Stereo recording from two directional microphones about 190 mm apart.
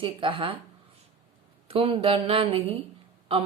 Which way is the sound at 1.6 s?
30° right (ahead or behind).